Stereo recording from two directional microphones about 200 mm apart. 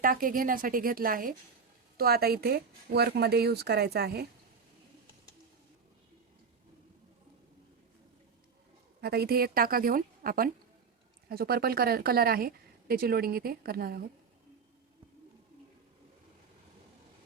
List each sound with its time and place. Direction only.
0.0 s speech: 45° right (ahead or behind)
9.0 s speech: 50° right (ahead or behind)